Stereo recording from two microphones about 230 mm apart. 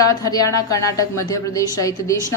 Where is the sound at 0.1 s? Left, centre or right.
Centre.